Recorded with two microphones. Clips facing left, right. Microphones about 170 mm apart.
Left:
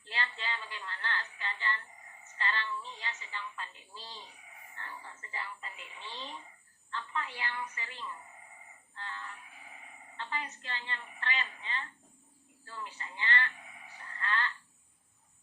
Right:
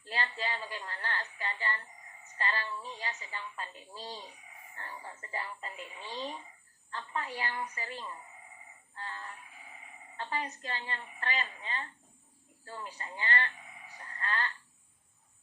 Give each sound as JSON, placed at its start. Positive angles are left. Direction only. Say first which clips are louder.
{"t": 0.1, "sound": "a woman's voice", "louder": "right 3 dB", "side_deg": -35}
{"t": 14.0, "sound": "frog", "louder": "even", "side_deg": -35}